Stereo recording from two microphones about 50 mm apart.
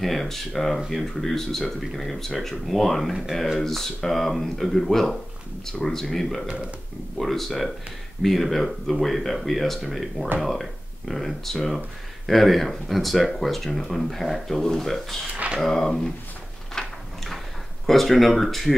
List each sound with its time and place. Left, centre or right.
0.0 s speech: centre
3.5 s speech: centre
6.4 s speech: centre
7.2 s speech: centre
16.7 s a sound: centre
17.8 s speech: centre